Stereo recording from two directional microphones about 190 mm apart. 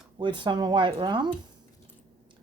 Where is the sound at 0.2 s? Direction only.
25° right (ahead or behind).